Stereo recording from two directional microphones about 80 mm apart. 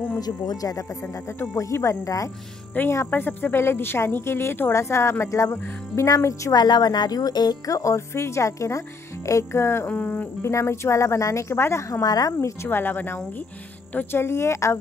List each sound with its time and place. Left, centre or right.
0.2 s speech: left
2.8 s speech: left
6.5 s speech: left
9.8 s speech: centre
10.4 s speech: left
12.0 s speech: left
12.4 s speech: left